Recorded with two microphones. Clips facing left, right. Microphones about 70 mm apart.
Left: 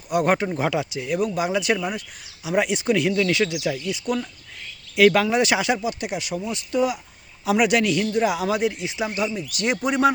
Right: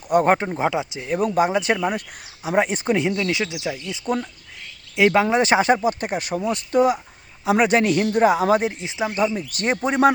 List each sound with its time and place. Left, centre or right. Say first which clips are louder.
0.1 s speech: right 3 dB; right
0.4 s speech: right 1 dB; right
1.9 s speech: right 4 dB; right
9.1 s speech: right 4 dB; right